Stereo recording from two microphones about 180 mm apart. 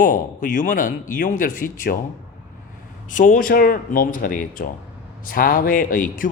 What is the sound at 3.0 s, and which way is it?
Speech, 45° left (ahead or behind).